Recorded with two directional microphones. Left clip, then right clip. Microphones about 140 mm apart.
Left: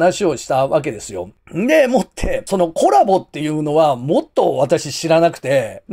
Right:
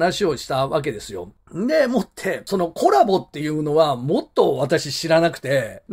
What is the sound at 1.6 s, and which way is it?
Speech, 35° left (ahead or behind).